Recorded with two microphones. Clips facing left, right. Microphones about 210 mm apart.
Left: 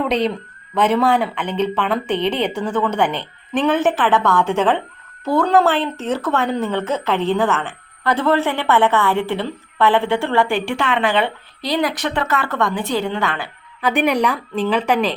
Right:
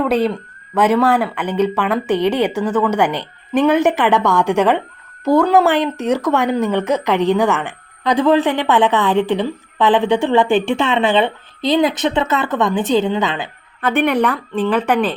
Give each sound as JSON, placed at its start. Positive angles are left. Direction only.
{"t": 0.0, "sound": "a woman's voice", "side_deg": -5}
{"t": 13.8, "sound": "a woman's voice", "side_deg": 0}